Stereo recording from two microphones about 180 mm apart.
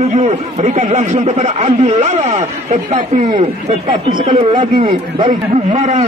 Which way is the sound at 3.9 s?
25° right (ahead or behind).